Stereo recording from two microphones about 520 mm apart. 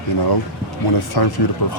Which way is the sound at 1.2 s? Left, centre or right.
Left.